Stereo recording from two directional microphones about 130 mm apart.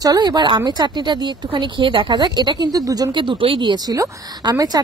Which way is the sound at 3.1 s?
40° right (ahead or behind).